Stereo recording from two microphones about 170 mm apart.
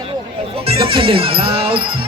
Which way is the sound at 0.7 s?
30° right (ahead or behind).